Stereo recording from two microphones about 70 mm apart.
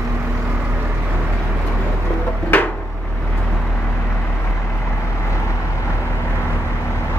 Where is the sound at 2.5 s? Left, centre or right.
Left.